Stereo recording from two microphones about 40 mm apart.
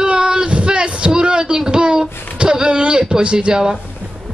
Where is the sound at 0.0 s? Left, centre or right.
Right.